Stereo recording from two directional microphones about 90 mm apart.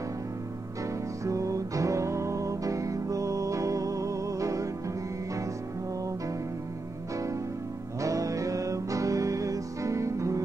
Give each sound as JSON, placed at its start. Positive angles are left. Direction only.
{"t": 1.2, "sound": "music", "side_deg": -35}
{"t": 8.0, "sound": "music", "side_deg": -35}